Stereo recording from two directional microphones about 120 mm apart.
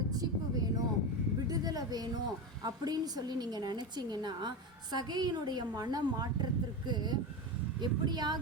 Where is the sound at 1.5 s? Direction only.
30° right (ahead or behind).